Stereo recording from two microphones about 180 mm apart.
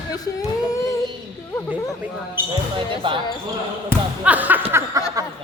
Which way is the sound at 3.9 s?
10° right (ahead or behind).